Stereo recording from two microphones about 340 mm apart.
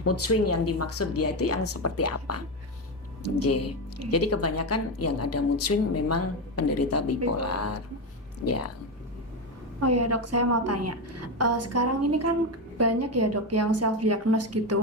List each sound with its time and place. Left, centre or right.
0.0 s a woman's voice: left
9.8 s a woman's voice: right